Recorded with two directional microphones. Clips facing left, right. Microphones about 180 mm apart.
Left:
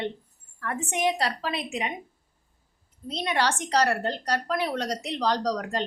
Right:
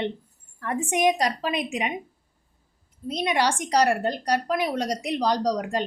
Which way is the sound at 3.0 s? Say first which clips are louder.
Right 3 dB; 10° right (ahead or behind).